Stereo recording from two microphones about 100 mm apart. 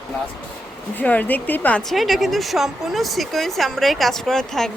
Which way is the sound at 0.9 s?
15° left (ahead or behind).